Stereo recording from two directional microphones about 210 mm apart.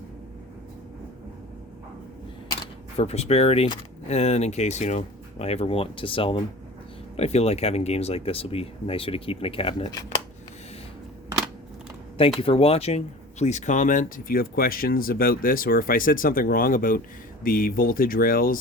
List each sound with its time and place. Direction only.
3.0 s speech: 30° left (ahead or behind)
12.4 s speech: 25° left (ahead or behind); by 18.5 s 45° left (ahead or behind)